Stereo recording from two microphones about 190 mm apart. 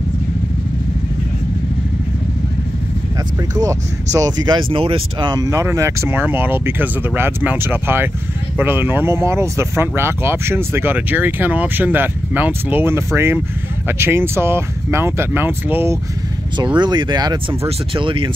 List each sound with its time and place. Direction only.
3.5 s speech: 20° right (ahead or behind)
16.5 s speech: 25° right (ahead or behind)